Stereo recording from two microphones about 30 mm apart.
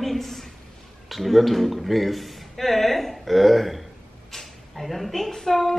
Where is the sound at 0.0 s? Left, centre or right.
Centre.